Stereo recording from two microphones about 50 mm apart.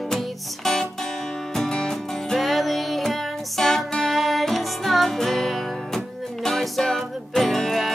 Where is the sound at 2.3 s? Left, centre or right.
Centre.